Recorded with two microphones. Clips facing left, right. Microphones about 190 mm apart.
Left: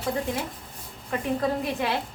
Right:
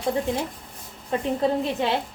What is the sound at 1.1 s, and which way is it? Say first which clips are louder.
Speech: right 3 dB; 25° right (ahead or behind).